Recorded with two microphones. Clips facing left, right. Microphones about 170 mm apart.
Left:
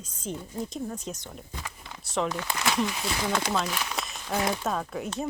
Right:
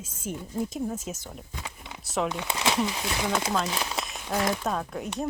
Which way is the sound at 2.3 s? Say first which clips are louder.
Right 1 dB; 20° right (ahead or behind).